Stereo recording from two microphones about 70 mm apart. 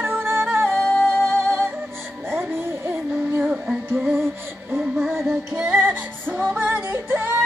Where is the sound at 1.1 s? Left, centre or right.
Centre.